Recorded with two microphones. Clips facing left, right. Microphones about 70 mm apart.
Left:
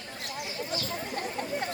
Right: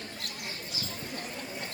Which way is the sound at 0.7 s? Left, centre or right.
Left.